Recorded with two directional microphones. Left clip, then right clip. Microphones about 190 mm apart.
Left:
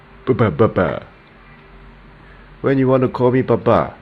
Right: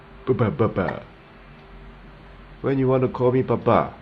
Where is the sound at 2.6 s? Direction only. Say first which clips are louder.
Left 6 dB; 20° left (ahead or behind).